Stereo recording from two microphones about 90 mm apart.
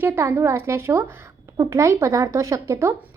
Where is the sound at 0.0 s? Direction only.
25° right (ahead or behind).